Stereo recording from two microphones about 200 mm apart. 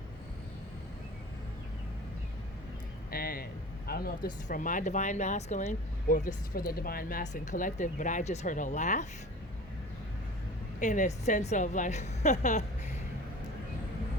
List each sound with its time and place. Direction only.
3.1 s a sound: 45° left (ahead or behind)
3.8 s speech: 50° left (ahead or behind)
10.8 s speech: 40° left (ahead or behind)